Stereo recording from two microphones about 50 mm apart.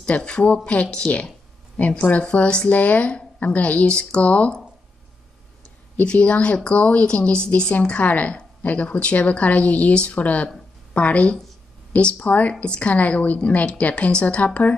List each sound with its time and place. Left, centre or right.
0.0 s a woman's voice: left
5.9 s a woman's voice: left